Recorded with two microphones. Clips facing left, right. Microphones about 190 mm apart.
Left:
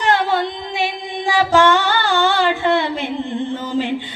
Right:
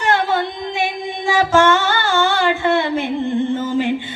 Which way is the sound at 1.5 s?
15° left (ahead or behind).